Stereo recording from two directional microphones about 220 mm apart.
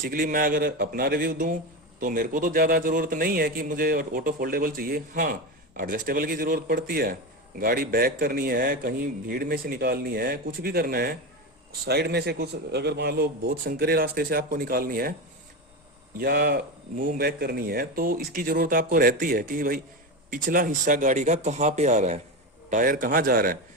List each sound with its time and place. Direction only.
0.0 s a man's voice: 40° right (ahead or behind)
16.1 s a man's voice: 40° right (ahead or behind)